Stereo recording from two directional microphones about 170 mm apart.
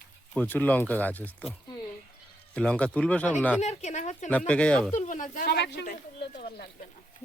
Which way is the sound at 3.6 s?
40° left (ahead or behind).